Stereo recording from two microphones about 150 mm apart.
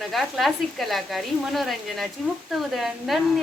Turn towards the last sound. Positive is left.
turn(degrees=0)  # may be behind; listen again after turning